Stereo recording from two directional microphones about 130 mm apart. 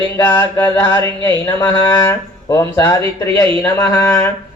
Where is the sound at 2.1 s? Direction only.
25° left (ahead or behind).